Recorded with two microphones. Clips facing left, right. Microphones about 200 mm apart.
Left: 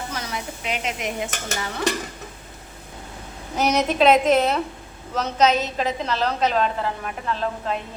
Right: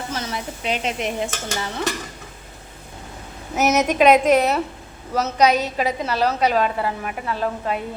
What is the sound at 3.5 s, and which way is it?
A woman's voice, 10° right (ahead or behind).